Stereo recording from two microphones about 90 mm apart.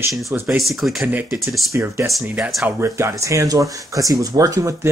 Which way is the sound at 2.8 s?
35° right (ahead or behind).